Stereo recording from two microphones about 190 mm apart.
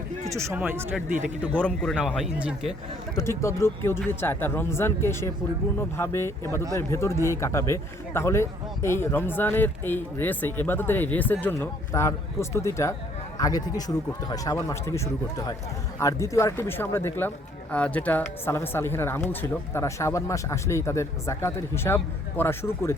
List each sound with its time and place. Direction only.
0.3 s speech: 15° right (ahead or behind)
1.5 s a man's voice: 5° left (ahead or behind)
3.2 s a man's voice: 15° left (ahead or behind)